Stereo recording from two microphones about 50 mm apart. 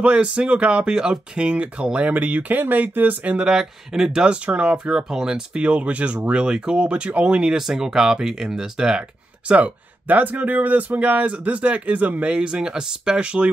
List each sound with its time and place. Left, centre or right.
0.0 s speech: right
3.3 s speech: centre
9.5 s speech: right